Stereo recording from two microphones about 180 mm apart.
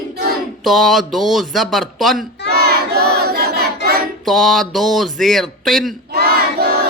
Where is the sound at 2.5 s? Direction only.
60° right (ahead or behind).